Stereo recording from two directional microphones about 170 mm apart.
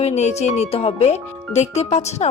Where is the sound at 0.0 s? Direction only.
40° left (ahead or behind).